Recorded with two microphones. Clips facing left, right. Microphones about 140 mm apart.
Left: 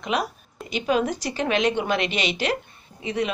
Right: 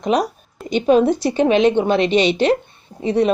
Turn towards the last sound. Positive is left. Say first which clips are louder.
# right 9 dB
turn(degrees=-35)  # may be behind; listen again after turning